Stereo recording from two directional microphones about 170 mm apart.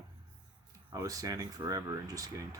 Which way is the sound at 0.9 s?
20° right (ahead or behind).